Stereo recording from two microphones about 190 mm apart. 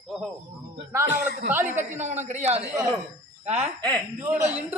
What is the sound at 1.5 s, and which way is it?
Speech, 10° right (ahead or behind).